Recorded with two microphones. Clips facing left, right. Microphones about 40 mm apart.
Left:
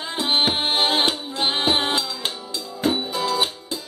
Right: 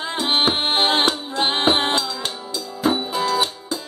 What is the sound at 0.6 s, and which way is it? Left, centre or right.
Music, centre.